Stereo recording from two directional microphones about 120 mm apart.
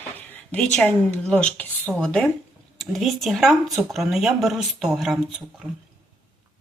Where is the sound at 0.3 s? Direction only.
5° left (ahead or behind).